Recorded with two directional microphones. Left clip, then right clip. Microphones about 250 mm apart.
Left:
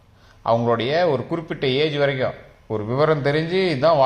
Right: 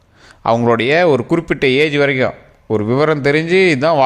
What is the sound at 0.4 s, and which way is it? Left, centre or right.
A man's voice, right.